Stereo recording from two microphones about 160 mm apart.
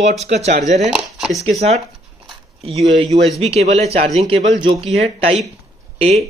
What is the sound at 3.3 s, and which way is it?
Speech, 40° right (ahead or behind).